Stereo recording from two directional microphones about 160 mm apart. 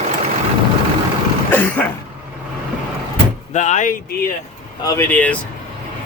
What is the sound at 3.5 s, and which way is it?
Speech, 50° left (ahead or behind).